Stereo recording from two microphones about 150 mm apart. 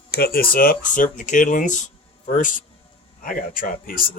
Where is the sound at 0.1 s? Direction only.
90° left.